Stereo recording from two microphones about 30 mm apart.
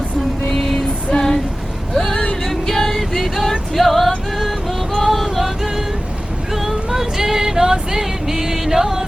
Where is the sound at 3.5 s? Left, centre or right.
Centre.